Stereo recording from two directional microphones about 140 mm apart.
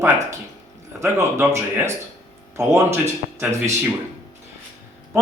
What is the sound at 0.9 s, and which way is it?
Speech, 20° right (ahead or behind).